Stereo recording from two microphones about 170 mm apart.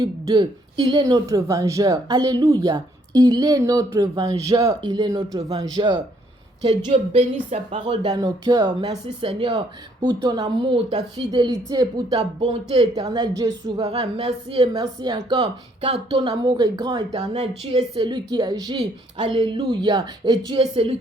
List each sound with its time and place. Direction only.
0.0 s a woman's voice: 25° right (ahead or behind)
5.4 s speech: 35° right (ahead or behind)
6.8 s a woman's voice: 35° right (ahead or behind)
12.4 s speech: 35° right (ahead or behind)
13.1 s a woman's voice: 20° right (ahead or behind)
13.7 s a woman's voice: 35° right (ahead or behind)
17.1 s speech: 40° right (ahead or behind)
17.7 s a woman's voice: 30° right (ahead or behind)